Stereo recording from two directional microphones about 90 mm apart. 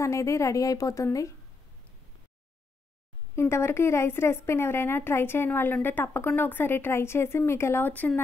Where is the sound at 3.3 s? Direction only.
30° left (ahead or behind).